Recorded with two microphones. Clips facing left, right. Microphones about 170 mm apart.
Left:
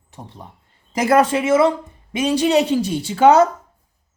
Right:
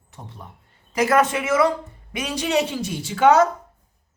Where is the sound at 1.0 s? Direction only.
30° left (ahead or behind).